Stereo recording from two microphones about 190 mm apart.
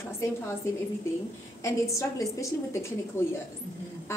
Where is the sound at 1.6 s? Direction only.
15° left (ahead or behind).